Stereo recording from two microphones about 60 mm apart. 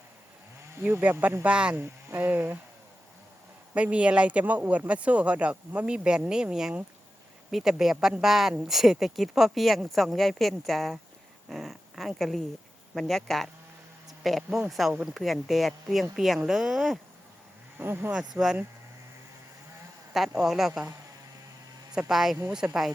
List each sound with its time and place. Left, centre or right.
0.8 s speech: right
1.5 s speech: centre
1.8 s speech: right
3.8 s speech: right; by 17.0 s centre
17.7 s speech: right
20.1 s speech: centre
22.1 s speech: centre